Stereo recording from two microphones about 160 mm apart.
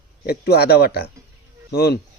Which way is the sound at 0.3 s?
85° left.